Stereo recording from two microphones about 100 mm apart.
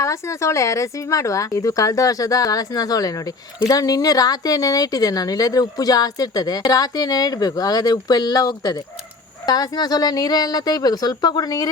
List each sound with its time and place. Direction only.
0.0 s speech: 30° left (ahead or behind)